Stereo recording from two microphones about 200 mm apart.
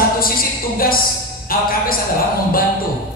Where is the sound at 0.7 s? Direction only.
45° left (ahead or behind).